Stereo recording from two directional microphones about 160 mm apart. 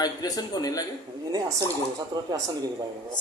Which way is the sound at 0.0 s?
25° left (ahead or behind).